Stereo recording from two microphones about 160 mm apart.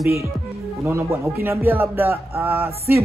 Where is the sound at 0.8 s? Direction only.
15° right (ahead or behind).